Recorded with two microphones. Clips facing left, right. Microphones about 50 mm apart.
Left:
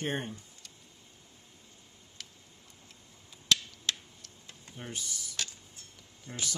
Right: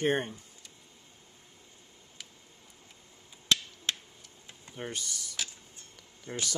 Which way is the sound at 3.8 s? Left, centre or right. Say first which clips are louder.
Right 1 dB; centre.